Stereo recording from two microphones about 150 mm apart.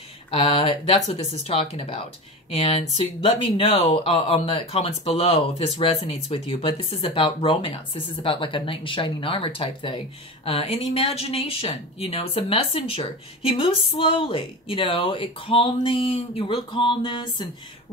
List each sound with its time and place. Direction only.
0.3 s speech: 40° left (ahead or behind)